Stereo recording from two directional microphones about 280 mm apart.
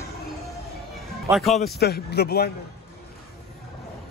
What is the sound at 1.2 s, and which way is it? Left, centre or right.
Speech, centre.